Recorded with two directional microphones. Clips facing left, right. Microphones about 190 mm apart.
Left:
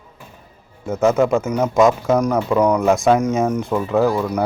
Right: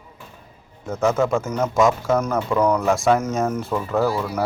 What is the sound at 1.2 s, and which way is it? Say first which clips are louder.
Speech: left 4 dB; 15° left (ahead or behind).